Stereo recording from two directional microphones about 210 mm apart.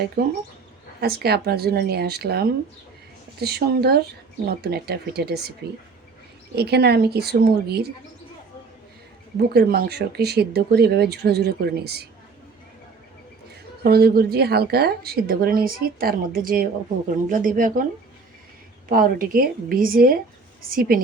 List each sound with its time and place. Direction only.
0.2 s speech: 45° right (ahead or behind)
6.6 s speech: 50° right (ahead or behind)
9.4 s speech: 50° right (ahead or behind)
13.8 s speech: 50° right (ahead or behind)
18.9 s speech: 40° right (ahead or behind)